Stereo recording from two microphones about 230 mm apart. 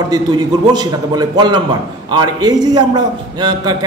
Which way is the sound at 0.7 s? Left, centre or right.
Centre.